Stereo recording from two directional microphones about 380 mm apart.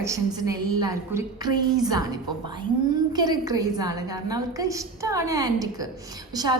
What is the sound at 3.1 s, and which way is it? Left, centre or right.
A woman's voice, centre.